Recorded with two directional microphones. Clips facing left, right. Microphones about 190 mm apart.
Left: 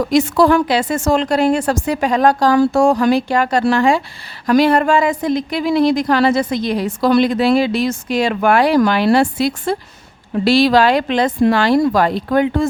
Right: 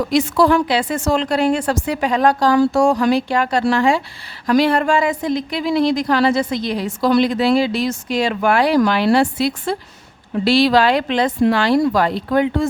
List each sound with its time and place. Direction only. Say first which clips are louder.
0.1 s a woman's voice: left 2 dB; 45° left (ahead or behind)